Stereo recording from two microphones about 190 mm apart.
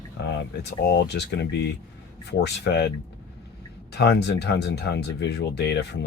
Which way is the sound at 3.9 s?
60° left (ahead or behind).